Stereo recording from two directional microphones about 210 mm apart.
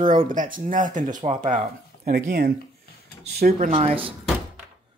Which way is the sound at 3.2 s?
45° right (ahead or behind).